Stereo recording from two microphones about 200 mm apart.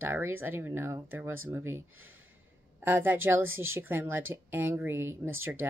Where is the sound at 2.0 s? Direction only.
90° right.